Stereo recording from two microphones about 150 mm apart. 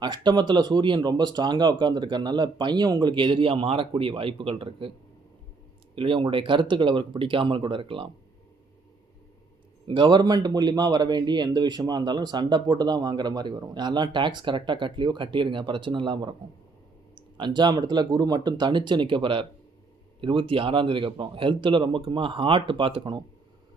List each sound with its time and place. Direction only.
0.0 s speech: 30° right (ahead or behind)
5.9 s speech: 35° right (ahead or behind)
9.8 s speech: 35° right (ahead or behind)